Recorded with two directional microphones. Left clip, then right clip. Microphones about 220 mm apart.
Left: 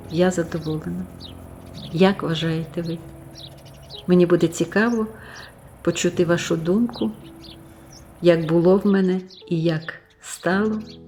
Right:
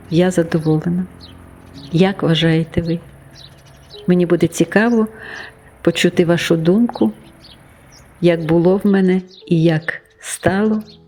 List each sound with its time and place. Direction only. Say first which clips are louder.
0.1 s speech: right 5 dB; 35° right (ahead or behind)
1.9 s speech: right 4 dB; 30° right (ahead or behind)
4.0 s speech: right 2 dB; 30° right (ahead or behind)
8.2 s speech: right 3 dB; 30° right (ahead or behind)